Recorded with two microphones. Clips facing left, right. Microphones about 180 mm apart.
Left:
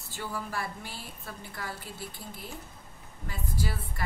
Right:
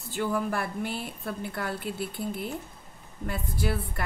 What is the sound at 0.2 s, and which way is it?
A woman's voice, 55° right (ahead or behind).